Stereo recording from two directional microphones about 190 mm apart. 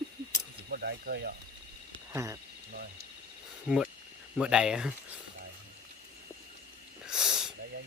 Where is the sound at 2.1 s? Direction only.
15° right (ahead or behind).